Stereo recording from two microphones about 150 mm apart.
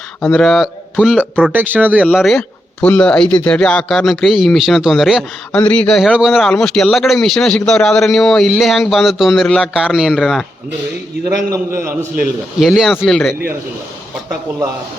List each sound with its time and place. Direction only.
0.2 s speech: centre (ahead or behind)
2.1 s speech: centre (ahead or behind)
11.8 s speech: 15° right (ahead or behind)
12.5 s speech: centre (ahead or behind)